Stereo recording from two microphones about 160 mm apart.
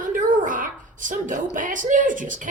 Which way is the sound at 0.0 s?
55° right (ahead or behind).